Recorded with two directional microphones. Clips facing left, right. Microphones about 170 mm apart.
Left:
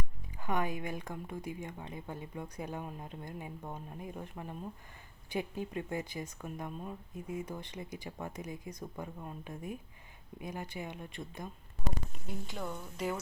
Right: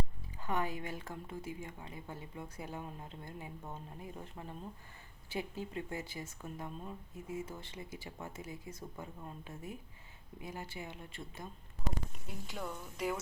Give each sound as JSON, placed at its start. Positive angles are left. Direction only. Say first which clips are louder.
{"t": 0.3, "sound": "a woman's voice", "louder": "left 2 dB", "side_deg": 15}
{"t": 12.5, "sound": "speech", "louder": "right 1 dB", "side_deg": -5}